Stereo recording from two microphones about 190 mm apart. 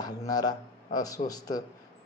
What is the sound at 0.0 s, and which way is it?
A man's voice, 20° left (ahead or behind).